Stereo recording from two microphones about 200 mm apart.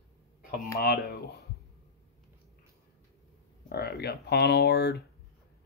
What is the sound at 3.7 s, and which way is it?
Speech, 50° left (ahead or behind).